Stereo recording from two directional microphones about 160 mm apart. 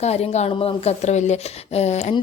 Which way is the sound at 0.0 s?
40° left (ahead or behind).